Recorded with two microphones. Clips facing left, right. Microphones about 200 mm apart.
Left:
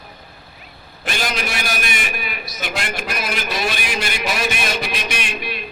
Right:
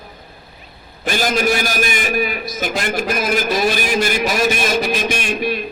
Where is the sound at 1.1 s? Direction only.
45° right (ahead or behind).